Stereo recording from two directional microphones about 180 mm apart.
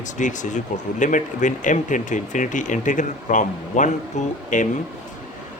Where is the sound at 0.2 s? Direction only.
45° left (ahead or behind).